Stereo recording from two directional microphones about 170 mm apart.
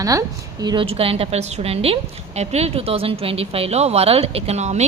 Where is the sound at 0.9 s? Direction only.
35° right (ahead or behind).